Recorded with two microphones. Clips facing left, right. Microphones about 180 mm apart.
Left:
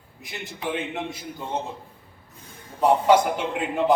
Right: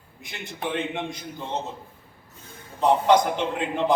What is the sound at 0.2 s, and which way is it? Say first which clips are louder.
A man's voice: right 1 dB; centre (ahead or behind).